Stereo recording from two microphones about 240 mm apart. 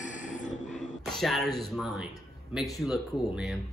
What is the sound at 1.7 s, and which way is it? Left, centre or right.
Speech, centre.